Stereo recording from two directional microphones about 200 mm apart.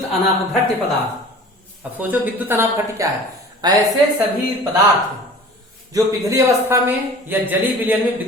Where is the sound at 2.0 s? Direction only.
10° right (ahead or behind).